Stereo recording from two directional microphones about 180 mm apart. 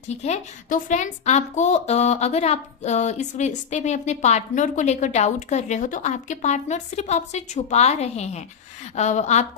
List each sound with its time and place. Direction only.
0.1 s a woman's voice: 40° left (ahead or behind)